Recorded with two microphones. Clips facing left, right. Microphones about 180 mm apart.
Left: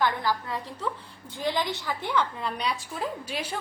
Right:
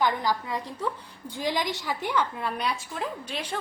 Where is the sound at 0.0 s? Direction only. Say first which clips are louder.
Right 1 dB; 15° right (ahead or behind).